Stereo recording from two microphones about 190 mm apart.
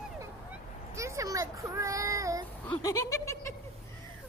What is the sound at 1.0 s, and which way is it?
A child's voice, 15° right (ahead or behind).